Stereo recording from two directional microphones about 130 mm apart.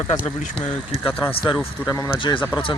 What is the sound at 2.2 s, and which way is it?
Speech, 40° left (ahead or behind).